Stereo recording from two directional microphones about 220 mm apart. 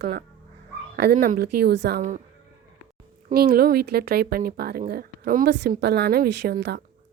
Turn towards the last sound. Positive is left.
turn(degrees=-50)  # may be behind; listen again after turning